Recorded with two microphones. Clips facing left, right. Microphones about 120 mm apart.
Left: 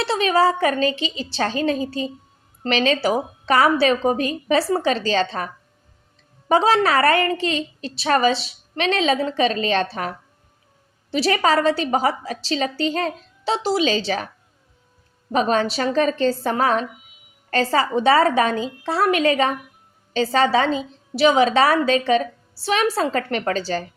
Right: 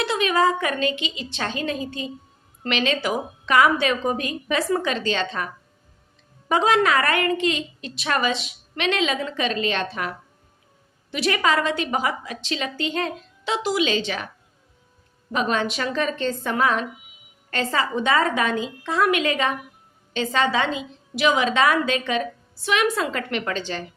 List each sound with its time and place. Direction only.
0.0 s a woman's voice: 35° left (ahead or behind)
6.5 s a woman's voice: 30° left (ahead or behind)
15.3 s a woman's voice: 35° left (ahead or behind)